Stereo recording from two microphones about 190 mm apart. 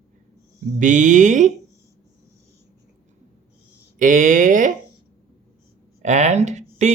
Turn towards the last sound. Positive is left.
turn(degrees=-40)  # may be behind; listen again after turning